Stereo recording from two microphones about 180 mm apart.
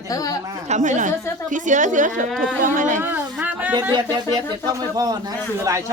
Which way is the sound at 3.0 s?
10° right (ahead or behind).